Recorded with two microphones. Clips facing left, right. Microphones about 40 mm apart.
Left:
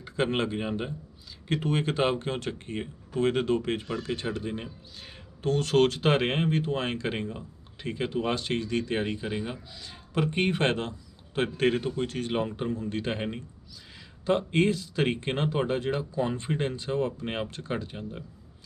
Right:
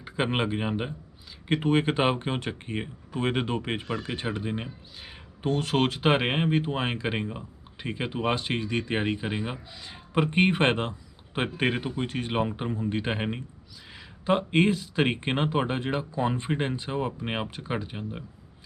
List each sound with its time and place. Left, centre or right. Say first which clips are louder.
0.0 s speech: even; centre